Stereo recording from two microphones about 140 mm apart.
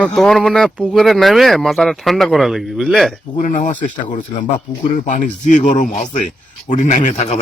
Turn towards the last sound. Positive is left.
turn(degrees=55)  # may be behind; listen again after turning